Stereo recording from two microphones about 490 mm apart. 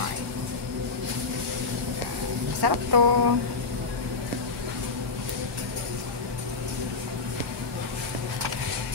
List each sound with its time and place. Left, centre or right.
2.6 s speech: right